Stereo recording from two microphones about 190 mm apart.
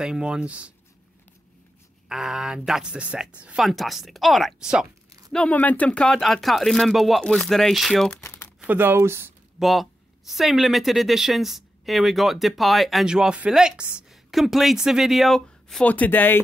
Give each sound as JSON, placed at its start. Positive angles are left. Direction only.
{"t": 0.0, "sound": "a woman's voice", "side_deg": -5}
{"t": 2.0, "sound": "a woman's voice", "side_deg": -5}
{"t": 8.2, "sound": "crumpling", "side_deg": 10}
{"t": 8.5, "sound": "speech", "side_deg": -10}
{"t": 9.6, "sound": "a woman's voice", "side_deg": 0}